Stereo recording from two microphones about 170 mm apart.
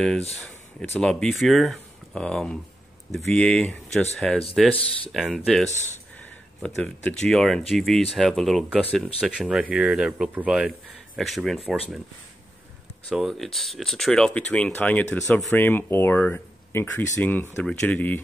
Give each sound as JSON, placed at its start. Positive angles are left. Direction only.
{"t": 0.4, "sound": "speech", "side_deg": 5}
{"t": 5.7, "sound": "speech", "side_deg": 45}
{"t": 6.6, "sound": "speech", "side_deg": 10}
{"t": 13.1, "sound": "speech", "side_deg": 0}